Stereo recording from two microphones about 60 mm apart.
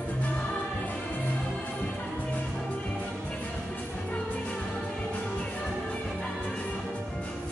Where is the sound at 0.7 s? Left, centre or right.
Left.